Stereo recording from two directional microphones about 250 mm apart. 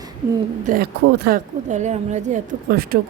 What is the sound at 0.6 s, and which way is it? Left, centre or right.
A woman's voice, right.